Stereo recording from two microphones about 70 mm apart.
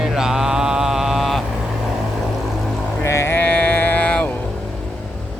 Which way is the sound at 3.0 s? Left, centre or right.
Left.